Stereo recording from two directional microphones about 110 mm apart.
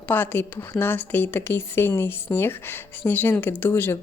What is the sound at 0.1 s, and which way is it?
Speech, 15° left (ahead or behind).